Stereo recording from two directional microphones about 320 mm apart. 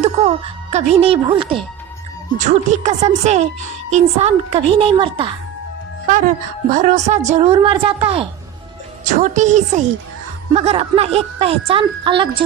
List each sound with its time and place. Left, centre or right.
0.0 s speech: right
6.7 s speech: right